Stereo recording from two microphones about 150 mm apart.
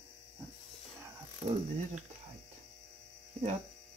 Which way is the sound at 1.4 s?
35° right (ahead or behind).